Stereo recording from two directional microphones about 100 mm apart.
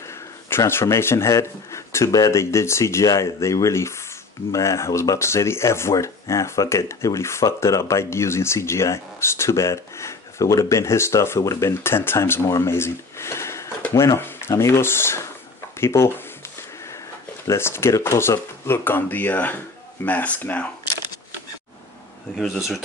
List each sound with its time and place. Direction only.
0.5 s speech: 25° left (ahead or behind)
17.5 s speech: 25° left (ahead or behind)
22.4 s speech: centre (ahead or behind)